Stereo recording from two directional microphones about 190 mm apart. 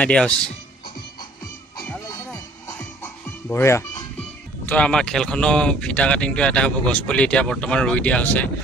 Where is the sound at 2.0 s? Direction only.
15° left (ahead or behind).